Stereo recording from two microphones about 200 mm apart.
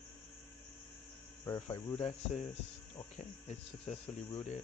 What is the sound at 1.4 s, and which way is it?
Speech, 20° left (ahead or behind).